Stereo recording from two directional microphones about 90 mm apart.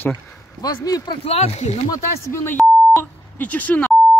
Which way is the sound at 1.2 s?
90° left.